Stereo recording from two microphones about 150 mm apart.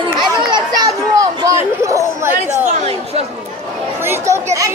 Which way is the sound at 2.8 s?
45° right (ahead or behind).